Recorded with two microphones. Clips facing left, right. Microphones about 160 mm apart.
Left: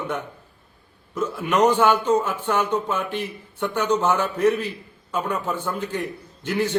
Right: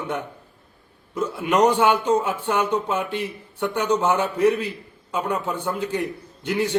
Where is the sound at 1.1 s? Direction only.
10° right (ahead or behind).